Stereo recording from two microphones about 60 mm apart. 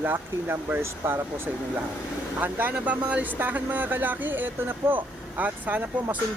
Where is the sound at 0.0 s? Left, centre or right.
Right.